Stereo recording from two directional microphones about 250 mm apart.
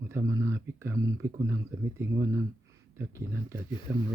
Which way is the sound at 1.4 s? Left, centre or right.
Centre.